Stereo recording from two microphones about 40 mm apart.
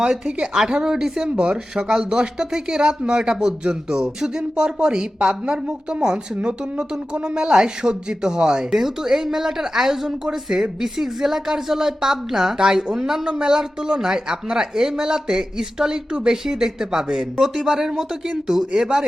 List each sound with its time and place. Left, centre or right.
0.6 s a woman's voice: centre
1.4 s a woman's voice: right
17.3 s a woman's voice: centre